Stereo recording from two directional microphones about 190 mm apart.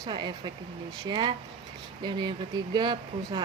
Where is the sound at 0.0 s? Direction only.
20° right (ahead or behind).